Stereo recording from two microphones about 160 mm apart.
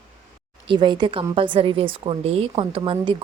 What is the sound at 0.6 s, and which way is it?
A woman's voice, 30° right (ahead or behind).